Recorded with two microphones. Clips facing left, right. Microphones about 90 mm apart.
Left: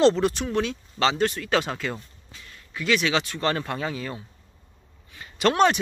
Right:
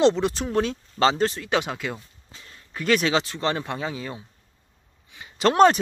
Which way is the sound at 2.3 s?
30° right (ahead or behind).